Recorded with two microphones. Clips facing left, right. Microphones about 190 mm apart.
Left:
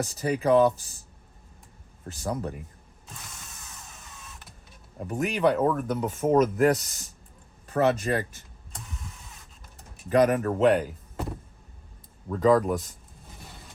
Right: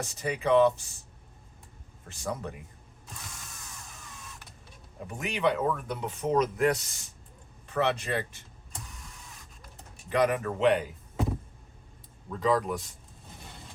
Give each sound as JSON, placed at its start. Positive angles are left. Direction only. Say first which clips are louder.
{"t": 0.1, "sound": "speech", "louder": "left 2 dB", "side_deg": 40}
{"t": 2.0, "sound": "speech", "louder": "left 4 dB", "side_deg": 40}
{"t": 5.2, "sound": "speech", "louder": "left 4 dB", "side_deg": 45}
{"t": 10.1, "sound": "speech", "louder": "left 5 dB", "side_deg": 45}
{"t": 12.3, "sound": "speech", "louder": "left 6 dB", "side_deg": 45}